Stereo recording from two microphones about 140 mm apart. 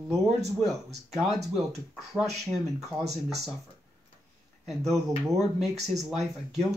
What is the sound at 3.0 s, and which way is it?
Speech, 50° right (ahead or behind).